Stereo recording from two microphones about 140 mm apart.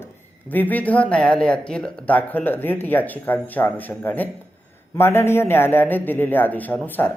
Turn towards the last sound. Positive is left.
turn(degrees=15)  # may be behind; listen again after turning